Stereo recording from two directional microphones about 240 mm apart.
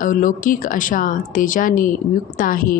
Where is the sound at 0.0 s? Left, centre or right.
Left.